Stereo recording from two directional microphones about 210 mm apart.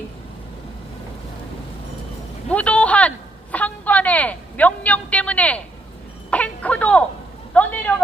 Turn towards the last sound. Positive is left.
turn(degrees=5)  # may be behind; listen again after turning